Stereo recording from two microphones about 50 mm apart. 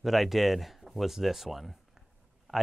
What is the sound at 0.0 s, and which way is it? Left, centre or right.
Speech, centre.